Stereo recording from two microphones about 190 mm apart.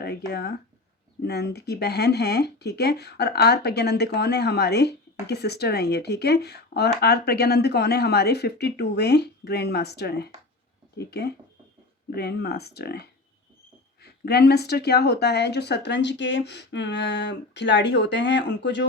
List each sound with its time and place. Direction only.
0.3 s speech: 60° left (ahead or behind)